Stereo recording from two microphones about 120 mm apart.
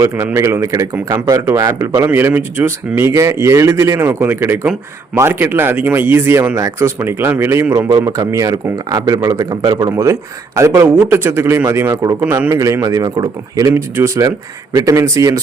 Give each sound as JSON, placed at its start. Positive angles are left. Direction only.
{"t": 0.3, "sound": "speech", "side_deg": -25}
{"t": 9.9, "sound": "speech", "side_deg": -25}